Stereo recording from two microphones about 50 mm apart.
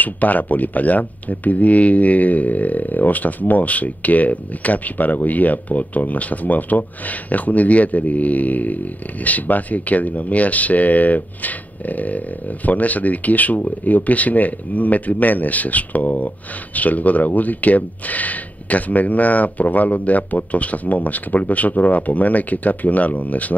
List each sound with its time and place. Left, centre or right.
0.0 s speech: left